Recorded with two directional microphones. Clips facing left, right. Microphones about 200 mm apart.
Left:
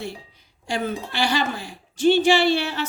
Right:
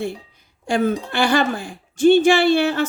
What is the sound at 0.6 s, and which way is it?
Speech, 50° right (ahead or behind).